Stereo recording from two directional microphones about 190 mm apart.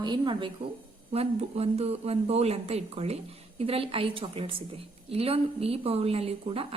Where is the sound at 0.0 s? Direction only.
25° right (ahead or behind).